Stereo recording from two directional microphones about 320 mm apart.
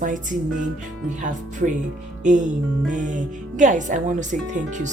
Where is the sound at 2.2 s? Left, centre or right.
Right.